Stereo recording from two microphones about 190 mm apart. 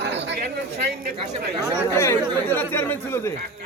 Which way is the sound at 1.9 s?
15° left (ahead or behind).